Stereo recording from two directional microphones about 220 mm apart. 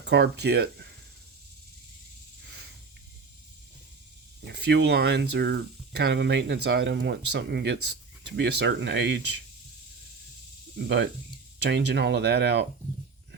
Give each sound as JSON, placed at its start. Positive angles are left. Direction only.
{"t": 0.0, "sound": "speech", "side_deg": -50}
{"t": 4.4, "sound": "speech", "side_deg": -50}
{"t": 10.8, "sound": "speech", "side_deg": -55}